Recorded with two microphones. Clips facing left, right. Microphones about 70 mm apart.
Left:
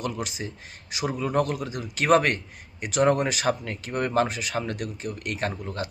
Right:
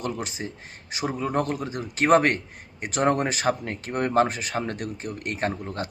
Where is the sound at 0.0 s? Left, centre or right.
Right.